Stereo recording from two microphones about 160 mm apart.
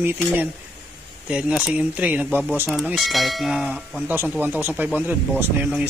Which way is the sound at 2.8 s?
Centre (ahead or behind).